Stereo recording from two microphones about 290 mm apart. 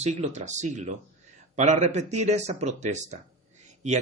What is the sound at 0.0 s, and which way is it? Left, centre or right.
Speech, right.